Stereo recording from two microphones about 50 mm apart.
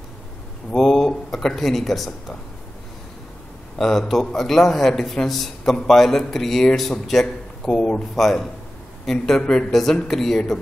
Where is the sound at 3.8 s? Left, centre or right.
Centre.